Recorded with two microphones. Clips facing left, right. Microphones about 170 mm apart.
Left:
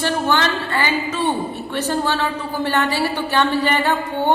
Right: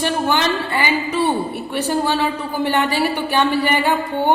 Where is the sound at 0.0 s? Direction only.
15° right (ahead or behind).